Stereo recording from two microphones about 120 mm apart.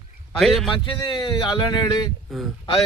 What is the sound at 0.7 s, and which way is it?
Speech, 40° left (ahead or behind).